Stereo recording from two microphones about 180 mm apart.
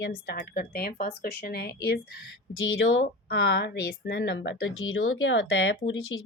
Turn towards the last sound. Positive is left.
turn(degrees=90)